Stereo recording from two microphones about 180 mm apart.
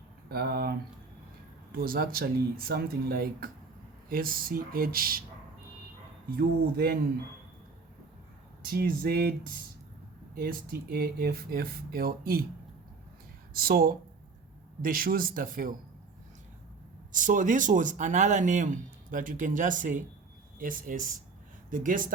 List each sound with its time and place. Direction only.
0.3 s speech: 60° right (ahead or behind)
6.3 s speech: 60° right (ahead or behind)
8.6 s speech: 55° right (ahead or behind)
10.3 s speech: 55° right (ahead or behind)
13.5 s speech: 55° right (ahead or behind)
17.1 s speech: 45° right (ahead or behind)